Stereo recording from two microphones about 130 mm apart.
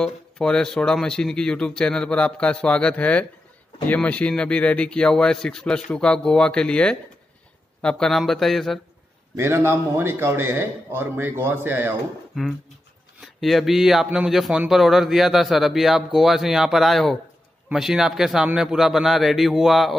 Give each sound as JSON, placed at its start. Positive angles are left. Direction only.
{"t": 0.0, "sound": "speech", "side_deg": 5}
{"t": 9.4, "sound": "speech", "side_deg": -20}
{"t": 13.2, "sound": "speech", "side_deg": 0}